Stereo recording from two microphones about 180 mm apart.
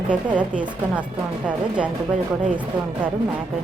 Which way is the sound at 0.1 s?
5° right (ahead or behind).